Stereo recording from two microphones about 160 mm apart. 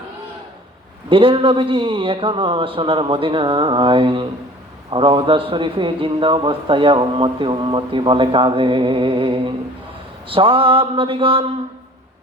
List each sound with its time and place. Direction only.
1.1 s a man's voice: 35° right (ahead or behind)